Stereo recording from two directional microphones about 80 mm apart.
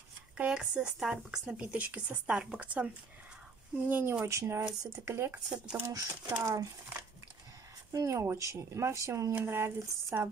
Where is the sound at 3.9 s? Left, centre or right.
Right.